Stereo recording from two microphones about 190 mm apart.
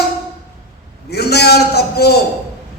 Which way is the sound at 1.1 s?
60° left (ahead or behind).